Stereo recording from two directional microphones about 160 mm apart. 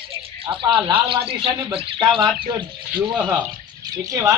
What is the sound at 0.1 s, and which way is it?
Music, 35° right (ahead or behind).